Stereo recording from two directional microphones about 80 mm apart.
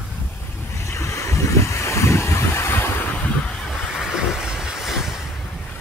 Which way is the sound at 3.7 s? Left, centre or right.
Centre.